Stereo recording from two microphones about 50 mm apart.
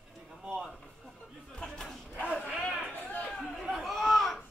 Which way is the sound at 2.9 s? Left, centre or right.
Left.